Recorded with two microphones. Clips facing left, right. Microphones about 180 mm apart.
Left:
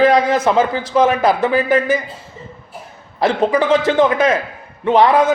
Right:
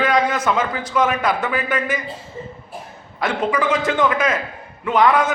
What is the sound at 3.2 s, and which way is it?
A man's voice, 30° left (ahead or behind).